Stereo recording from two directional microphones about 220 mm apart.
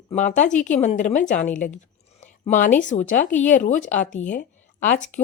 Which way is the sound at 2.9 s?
35° left (ahead or behind).